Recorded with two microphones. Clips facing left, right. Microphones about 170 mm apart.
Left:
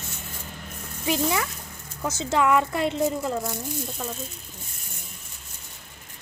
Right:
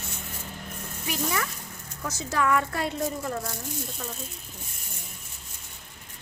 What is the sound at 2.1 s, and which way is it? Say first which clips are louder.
A woman's voice: left 4 dB; 25° left (ahead or behind).